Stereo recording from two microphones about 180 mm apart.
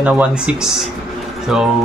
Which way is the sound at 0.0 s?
5° right (ahead or behind).